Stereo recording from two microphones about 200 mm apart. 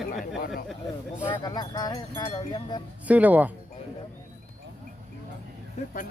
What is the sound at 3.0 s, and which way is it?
Speech, 10° right (ahead or behind).